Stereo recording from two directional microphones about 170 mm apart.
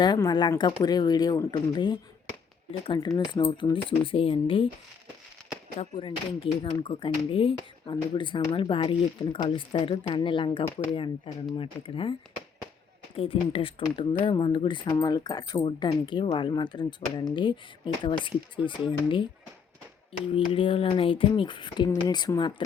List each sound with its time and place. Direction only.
0.0 s speech: 25° left (ahead or behind)
5.8 s speech: 30° left (ahead or behind)
13.1 s speech: 35° left (ahead or behind)
20.3 s speech: 30° left (ahead or behind)